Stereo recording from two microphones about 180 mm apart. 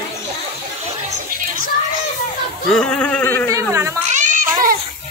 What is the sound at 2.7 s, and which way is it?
Speech, 5° left (ahead or behind).